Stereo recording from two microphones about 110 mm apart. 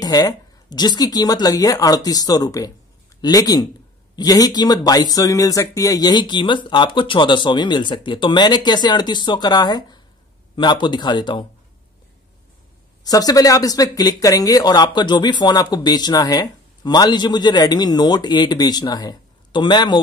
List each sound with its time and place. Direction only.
0.0 s speech: 35° left (ahead or behind)
13.0 s speech: 35° left (ahead or behind)